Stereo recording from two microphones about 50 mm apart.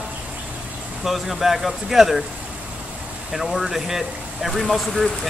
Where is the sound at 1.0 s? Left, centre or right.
Centre.